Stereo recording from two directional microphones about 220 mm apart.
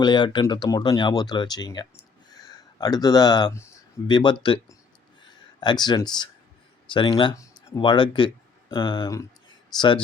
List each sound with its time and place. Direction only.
0.0 s speech: 20° left (ahead or behind)
5.5 s speech: 20° left (ahead or behind)